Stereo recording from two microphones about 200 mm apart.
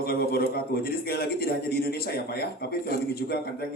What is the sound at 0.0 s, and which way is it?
A man's voice, 50° left (ahead or behind).